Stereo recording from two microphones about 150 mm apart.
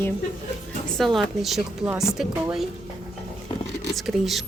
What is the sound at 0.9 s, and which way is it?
Speech, centre (ahead or behind).